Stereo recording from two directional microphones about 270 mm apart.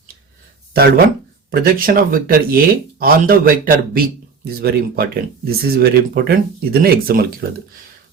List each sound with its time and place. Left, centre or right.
0.7 s speech: right